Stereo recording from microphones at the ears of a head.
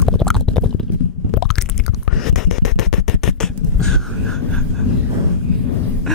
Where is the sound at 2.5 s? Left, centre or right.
Left.